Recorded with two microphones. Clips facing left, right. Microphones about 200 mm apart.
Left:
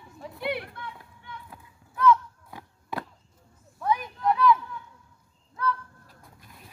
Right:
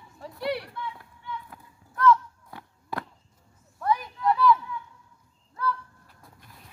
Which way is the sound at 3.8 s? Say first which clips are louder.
Even; centre (ahead or behind).